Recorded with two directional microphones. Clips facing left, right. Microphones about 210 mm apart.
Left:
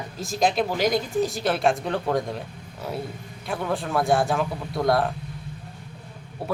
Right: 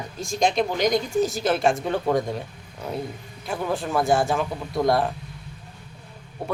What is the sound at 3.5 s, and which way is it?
Speech, centre (ahead or behind).